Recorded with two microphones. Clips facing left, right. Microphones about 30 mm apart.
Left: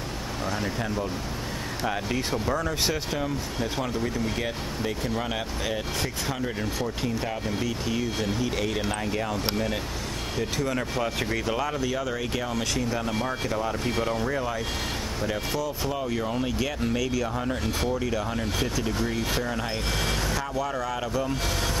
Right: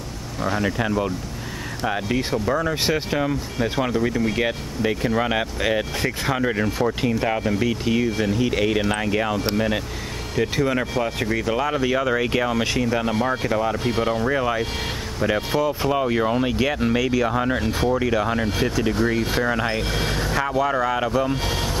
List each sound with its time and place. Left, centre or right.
0.4 s speech: right
11.0 s speech: centre
11.7 s speech: right